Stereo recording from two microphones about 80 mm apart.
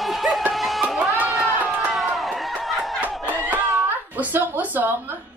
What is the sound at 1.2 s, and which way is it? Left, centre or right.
Run, centre.